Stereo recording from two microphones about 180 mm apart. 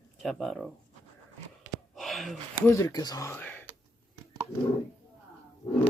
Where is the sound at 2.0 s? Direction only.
Centre (ahead or behind).